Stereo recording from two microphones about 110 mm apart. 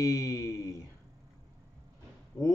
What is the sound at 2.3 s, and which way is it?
Speech, 35° left (ahead or behind).